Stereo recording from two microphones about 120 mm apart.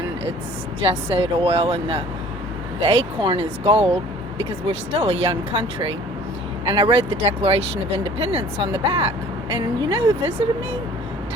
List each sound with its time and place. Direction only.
0.8 s speech: 55° right (ahead or behind)
2.9 s speech: 45° right (ahead or behind)